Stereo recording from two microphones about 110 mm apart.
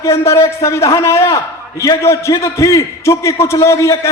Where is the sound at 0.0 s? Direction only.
25° left (ahead or behind).